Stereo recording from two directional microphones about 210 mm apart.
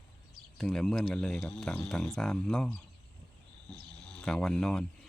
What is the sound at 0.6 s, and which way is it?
Speech, 5° left (ahead or behind).